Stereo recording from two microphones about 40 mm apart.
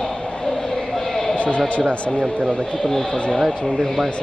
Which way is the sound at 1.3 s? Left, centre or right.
Left.